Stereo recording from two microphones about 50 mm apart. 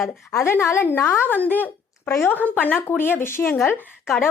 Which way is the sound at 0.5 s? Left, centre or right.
Left.